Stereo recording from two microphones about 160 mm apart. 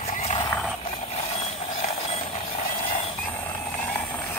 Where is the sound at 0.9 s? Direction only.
40° left (ahead or behind).